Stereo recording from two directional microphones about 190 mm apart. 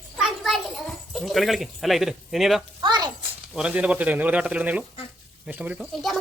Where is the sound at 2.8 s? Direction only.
25° right (ahead or behind).